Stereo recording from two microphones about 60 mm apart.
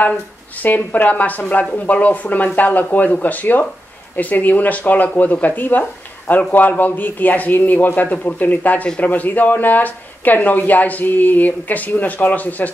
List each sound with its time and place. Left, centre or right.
0.6 s speech: left